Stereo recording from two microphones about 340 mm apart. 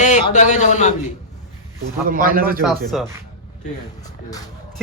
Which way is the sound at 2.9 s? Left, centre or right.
Centre.